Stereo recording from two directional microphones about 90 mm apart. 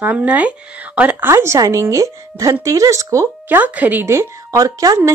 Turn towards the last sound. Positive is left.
turn(degrees=-40)  # may be behind; listen again after turning